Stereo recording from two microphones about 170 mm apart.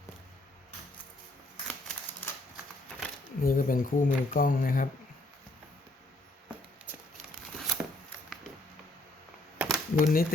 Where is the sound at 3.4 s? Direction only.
55° left (ahead or behind).